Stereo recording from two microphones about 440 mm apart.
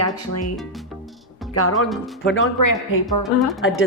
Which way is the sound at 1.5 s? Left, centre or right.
Left.